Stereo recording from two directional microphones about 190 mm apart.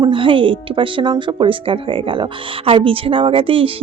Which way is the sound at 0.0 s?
25° right (ahead or behind).